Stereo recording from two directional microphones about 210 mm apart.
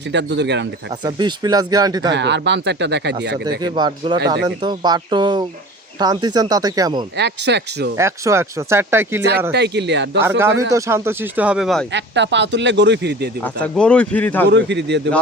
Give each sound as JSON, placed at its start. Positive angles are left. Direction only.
{"t": 0.1, "sound": "speech", "side_deg": -55}
{"t": 1.0, "sound": "speech", "side_deg": -20}
{"t": 2.1, "sound": "speech", "side_deg": -55}
{"t": 3.6, "sound": "speech", "side_deg": -20}
{"t": 7.2, "sound": "speech", "side_deg": -55}
{"t": 7.9, "sound": "speech", "side_deg": -15}
{"t": 9.5, "sound": "speech", "side_deg": -55}
{"t": 10.2, "sound": "speech", "side_deg": -10}
{"t": 11.9, "sound": "speech", "side_deg": -55}
{"t": 13.4, "sound": "speech", "side_deg": 5}
{"t": 14.4, "sound": "speech", "side_deg": -55}